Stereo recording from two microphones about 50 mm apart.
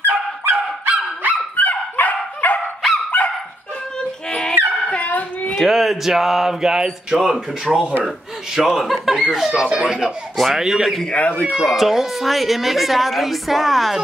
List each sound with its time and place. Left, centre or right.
0.0 s fowl: right
1.6 s dog: left
4.0 s a sound: centre
5.0 s a sound: left
5.6 s music: centre
7.7 s speech: centre
8.5 s music: centre
10.3 s speech: centre
11.1 s speech: left
11.5 s speech: centre